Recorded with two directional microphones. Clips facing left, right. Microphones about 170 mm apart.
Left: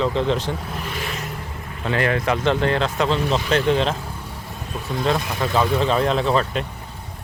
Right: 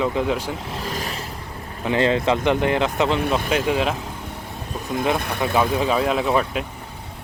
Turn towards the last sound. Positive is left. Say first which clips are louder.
# even
turn(degrees=-10)  # may be behind; listen again after turning